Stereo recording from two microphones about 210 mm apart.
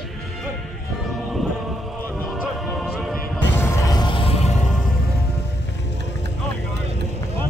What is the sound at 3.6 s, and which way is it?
Music, 15° left (ahead or behind).